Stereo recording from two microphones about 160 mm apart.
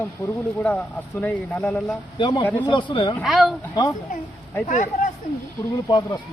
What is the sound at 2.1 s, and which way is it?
Speech, 30° left (ahead or behind).